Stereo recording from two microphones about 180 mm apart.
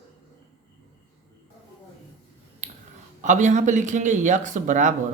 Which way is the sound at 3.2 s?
40° right (ahead or behind).